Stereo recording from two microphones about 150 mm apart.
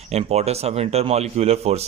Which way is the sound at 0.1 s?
45° right (ahead or behind).